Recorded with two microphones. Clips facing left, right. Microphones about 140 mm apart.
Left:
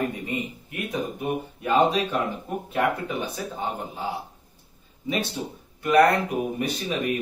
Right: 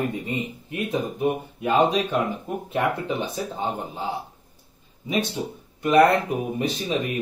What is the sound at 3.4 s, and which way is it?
Speech, 25° right (ahead or behind).